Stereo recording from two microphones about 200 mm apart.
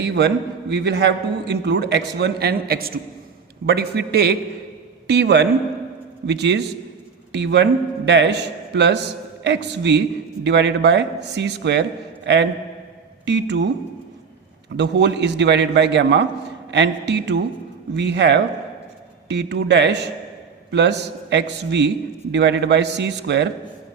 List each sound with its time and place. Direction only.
0.0 s a man's voice: 60° right (ahead or behind)
14.8 s a man's voice: 60° right (ahead or behind)